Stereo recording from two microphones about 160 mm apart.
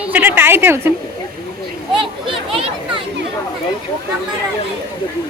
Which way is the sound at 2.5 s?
35° right (ahead or behind).